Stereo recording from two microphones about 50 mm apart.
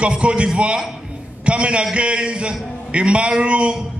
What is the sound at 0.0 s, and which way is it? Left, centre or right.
A man's voice, right.